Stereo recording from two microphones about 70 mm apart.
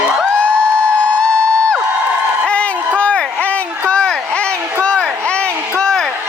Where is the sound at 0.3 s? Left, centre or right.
Centre.